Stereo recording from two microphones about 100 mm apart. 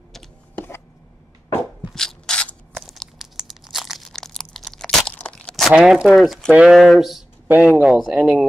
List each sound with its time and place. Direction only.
0.6 s chopping: 25° left (ahead or behind)
2.0 s a sound: 5° left (ahead or behind)
2.8 s crunch: centre (ahead or behind)
5.7 s speech: 5° right (ahead or behind)
7.4 s speech: 15° right (ahead or behind)